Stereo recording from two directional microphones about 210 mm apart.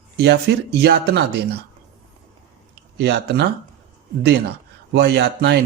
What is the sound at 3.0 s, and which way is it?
A man's voice, 55° right (ahead or behind).